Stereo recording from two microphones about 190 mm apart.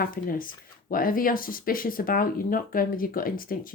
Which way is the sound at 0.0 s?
50° left (ahead or behind).